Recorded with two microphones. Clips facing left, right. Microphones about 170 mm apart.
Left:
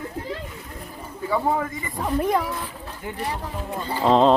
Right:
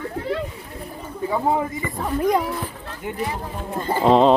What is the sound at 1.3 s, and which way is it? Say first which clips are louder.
Speech: right 1 dB; 20° right (ahead or behind).